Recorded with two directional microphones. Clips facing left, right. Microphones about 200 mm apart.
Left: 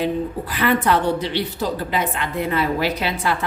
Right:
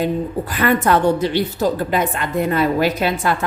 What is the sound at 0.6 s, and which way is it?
A woman's voice, 45° right (ahead or behind).